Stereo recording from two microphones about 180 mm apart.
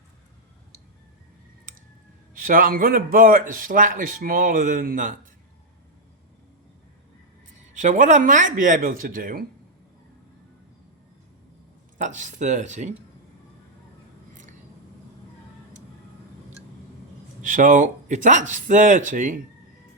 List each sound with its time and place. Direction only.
2.3 s a man's voice: 50° right (ahead or behind)
7.7 s a man's voice: 45° right (ahead or behind)
11.9 s a man's voice: 45° right (ahead or behind)
17.4 s a man's voice: 50° right (ahead or behind)